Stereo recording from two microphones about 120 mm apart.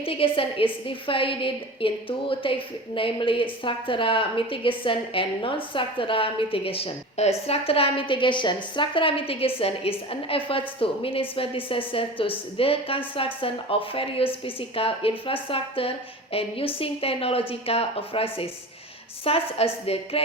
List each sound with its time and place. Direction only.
0.0 s a woman's voice: 50° left (ahead or behind)